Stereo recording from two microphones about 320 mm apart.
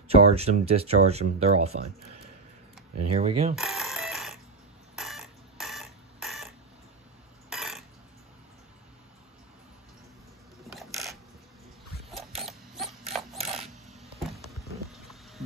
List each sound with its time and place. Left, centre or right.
0.1 s speech: centre
3.1 s speech: centre
3.5 s alarm clock: centre
4.9 s a sound: centre
10.8 s mechanisms: centre
12.4 s a sound: centre